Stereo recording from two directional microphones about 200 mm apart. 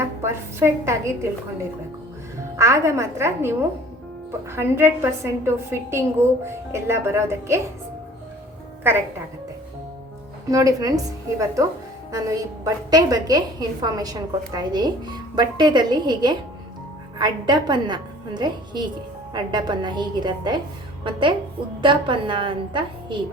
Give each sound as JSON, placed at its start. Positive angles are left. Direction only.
{"t": 0.2, "sound": "a woman's voice", "side_deg": -15}
{"t": 2.6, "sound": "a woman's voice", "side_deg": -15}
{"t": 10.5, "sound": "a woman's voice", "side_deg": -15}